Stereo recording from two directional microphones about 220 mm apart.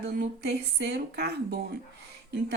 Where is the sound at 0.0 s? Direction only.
45° right (ahead or behind).